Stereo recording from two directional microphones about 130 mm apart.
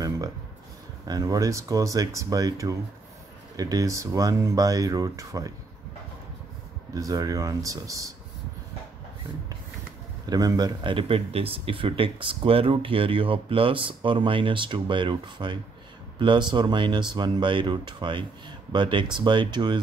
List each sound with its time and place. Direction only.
1.0 s speech: 30° right (ahead or behind)
6.9 s speech: 25° right (ahead or behind)
10.3 s speech: 30° right (ahead or behind)